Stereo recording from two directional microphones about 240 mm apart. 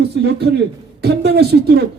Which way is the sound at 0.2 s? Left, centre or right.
Right.